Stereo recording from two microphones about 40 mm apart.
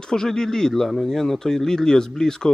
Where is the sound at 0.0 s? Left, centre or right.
Centre.